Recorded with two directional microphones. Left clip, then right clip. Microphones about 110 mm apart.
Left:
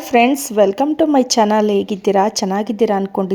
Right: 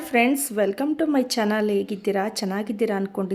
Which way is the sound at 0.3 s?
40° left (ahead or behind).